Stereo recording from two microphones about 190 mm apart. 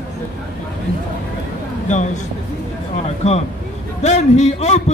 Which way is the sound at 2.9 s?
35° left (ahead or behind).